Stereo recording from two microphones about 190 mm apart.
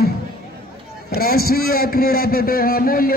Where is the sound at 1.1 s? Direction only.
55° left (ahead or behind).